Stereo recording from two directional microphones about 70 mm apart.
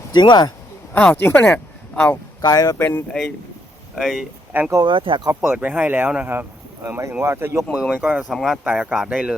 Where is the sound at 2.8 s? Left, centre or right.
Left.